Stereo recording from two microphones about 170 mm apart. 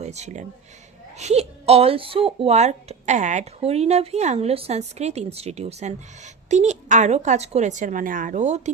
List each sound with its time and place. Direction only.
0.0 s speech: 40° right (ahead or behind)